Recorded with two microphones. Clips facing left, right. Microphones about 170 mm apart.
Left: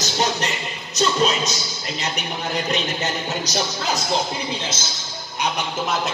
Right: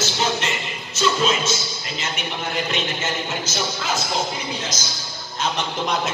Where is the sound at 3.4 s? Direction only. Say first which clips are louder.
Left 2 dB; 35° left (ahead or behind).